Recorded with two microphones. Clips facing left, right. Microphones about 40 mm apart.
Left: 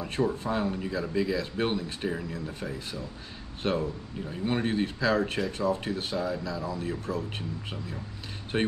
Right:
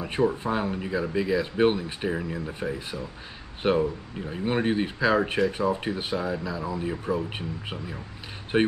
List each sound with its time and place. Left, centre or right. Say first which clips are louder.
0.0 s speech: right 4 dB; centre